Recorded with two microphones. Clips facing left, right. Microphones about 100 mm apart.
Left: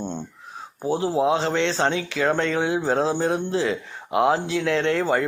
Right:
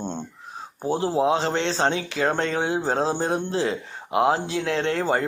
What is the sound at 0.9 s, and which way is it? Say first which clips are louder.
Speech: even; 30° right (ahead or behind).